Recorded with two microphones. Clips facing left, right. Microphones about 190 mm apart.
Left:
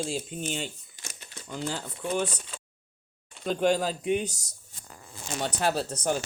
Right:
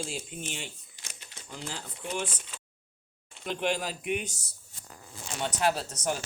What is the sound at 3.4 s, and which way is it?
Speech, 35° left (ahead or behind).